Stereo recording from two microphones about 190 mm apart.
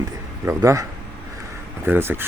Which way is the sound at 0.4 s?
15° right (ahead or behind).